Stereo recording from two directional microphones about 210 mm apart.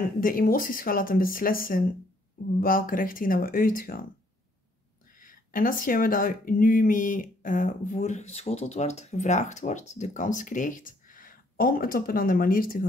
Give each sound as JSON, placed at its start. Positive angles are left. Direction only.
{"t": 0.2, "sound": "speech", "side_deg": 40}
{"t": 5.2, "sound": "speech", "side_deg": 40}